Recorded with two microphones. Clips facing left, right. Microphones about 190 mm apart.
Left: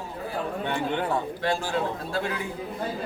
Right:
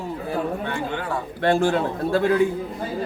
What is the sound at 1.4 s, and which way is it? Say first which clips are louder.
Speech: right 11 dB; 60° right (ahead or behind).